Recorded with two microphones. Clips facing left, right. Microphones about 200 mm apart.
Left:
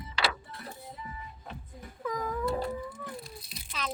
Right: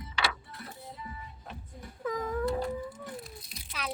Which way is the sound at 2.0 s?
25° right (ahead or behind).